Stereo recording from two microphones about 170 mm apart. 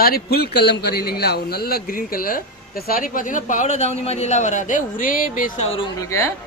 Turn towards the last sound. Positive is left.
turn(degrees=15)  # may be behind; listen again after turning